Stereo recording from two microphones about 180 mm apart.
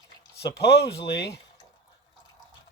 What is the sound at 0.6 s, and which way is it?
Speech, 65° left (ahead or behind).